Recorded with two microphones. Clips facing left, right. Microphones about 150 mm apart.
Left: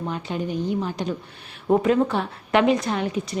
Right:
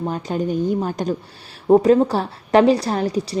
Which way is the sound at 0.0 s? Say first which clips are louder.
Right 5 dB; 40° right (ahead or behind).